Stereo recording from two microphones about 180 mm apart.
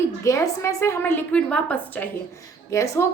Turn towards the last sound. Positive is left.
turn(degrees=15)  # may be behind; listen again after turning